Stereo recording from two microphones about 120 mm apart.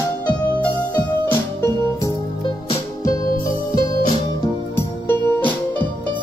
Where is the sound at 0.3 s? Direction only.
15° left (ahead or behind).